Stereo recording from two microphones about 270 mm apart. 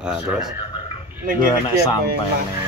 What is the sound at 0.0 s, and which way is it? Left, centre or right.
Speech, centre.